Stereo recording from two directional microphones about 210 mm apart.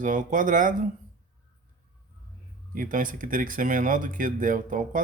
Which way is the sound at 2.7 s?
40° right (ahead or behind).